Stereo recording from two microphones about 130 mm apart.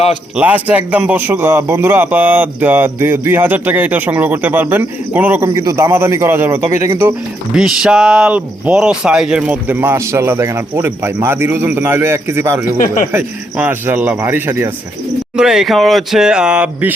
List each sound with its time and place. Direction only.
0.3 s speech: 10° right (ahead or behind)
5.4 s speech: 25° right (ahead or behind)
7.5 s speech: 5° right (ahead or behind)
12.8 s speech: 85° left
13.1 s speech: 15° right (ahead or behind)
15.4 s speech: 5° right (ahead or behind)